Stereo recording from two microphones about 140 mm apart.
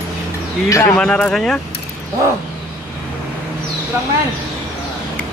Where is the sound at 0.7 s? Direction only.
15° left (ahead or behind).